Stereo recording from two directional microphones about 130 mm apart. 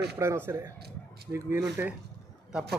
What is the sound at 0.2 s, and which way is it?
Speech, 20° right (ahead or behind).